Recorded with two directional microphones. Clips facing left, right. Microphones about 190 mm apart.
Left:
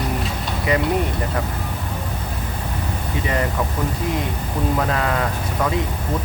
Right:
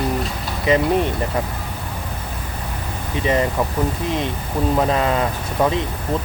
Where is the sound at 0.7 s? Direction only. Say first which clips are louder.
Right 4 dB; 20° right (ahead or behind).